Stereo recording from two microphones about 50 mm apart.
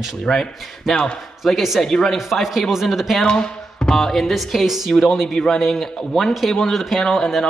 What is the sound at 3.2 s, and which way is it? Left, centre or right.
Speech, centre.